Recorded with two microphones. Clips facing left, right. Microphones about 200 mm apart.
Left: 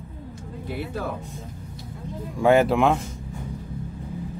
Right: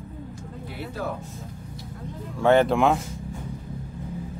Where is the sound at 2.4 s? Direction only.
10° left (ahead or behind).